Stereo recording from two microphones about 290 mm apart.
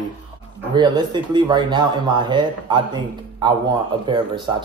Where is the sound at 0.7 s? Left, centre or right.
Centre.